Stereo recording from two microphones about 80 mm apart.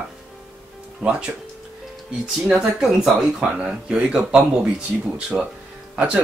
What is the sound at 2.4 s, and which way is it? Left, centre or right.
Speech, centre.